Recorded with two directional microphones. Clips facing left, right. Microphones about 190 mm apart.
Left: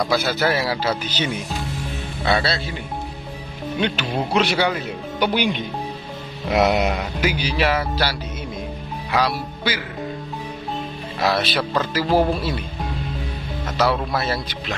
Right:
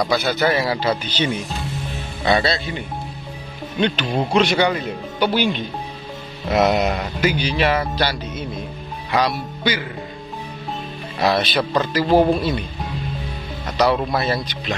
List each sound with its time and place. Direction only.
0.0 s speech: centre (ahead or behind)
3.8 s speech: 10° left (ahead or behind)
5.3 s speech: 15° left (ahead or behind)
11.1 s speech: centre (ahead or behind)
13.8 s speech: 5° left (ahead or behind)